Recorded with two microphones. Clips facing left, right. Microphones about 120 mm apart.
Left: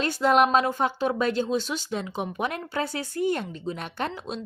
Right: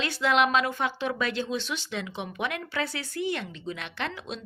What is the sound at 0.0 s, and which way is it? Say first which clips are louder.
A woman's voice: left 4 dB; 45° left (ahead or behind).